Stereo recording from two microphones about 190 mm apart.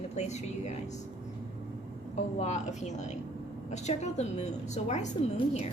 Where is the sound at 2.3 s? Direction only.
40° left (ahead or behind).